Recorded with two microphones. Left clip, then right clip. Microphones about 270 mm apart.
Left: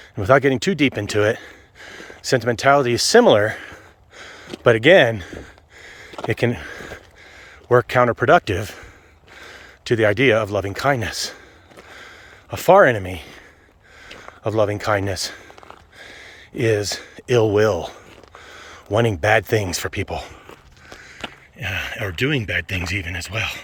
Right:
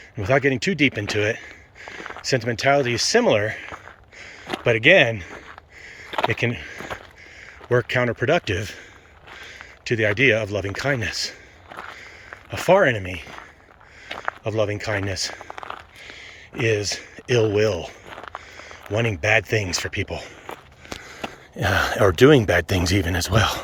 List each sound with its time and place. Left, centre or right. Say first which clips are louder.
0.2 s speech: left 4 dB; centre
9.9 s speech: left 3 dB; centre
12.5 s speech: left 4 dB; centre
14.5 s speech: left 6 dB; centre
16.6 s speech: left 2 dB; centre
18.9 s speech: left 3 dB; centre
21.0 s a sound: left 2 dB; centre
21.6 s speech: right 7 dB; right